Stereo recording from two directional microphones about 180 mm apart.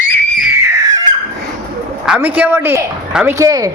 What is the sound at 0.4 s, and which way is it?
Crying, 15° right (ahead or behind).